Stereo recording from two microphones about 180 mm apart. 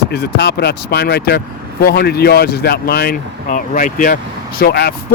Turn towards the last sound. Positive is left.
turn(degrees=60)  # may be behind; listen again after turning